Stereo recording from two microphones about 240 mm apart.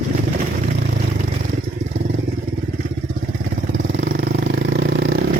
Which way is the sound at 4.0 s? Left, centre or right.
Right.